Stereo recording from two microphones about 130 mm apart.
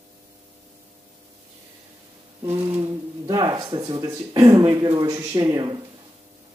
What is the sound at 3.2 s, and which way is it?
Speech, 30° right (ahead or behind).